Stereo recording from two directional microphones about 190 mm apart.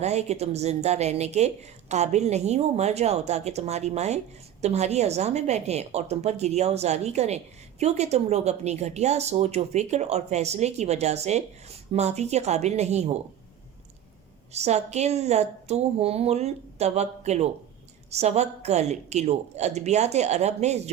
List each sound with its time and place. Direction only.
0.0 s a woman's voice: 35° right (ahead or behind)
14.5 s a woman's voice: 35° right (ahead or behind)